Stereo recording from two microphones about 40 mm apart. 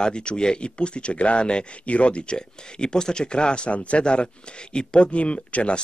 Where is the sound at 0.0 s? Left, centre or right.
Left.